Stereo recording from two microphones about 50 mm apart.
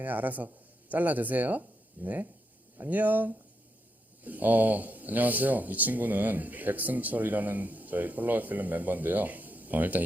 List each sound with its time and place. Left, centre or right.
0.0 s speech: right